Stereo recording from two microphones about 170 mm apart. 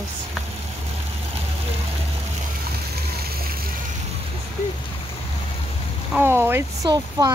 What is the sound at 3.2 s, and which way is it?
Splash, 65° right (ahead or behind).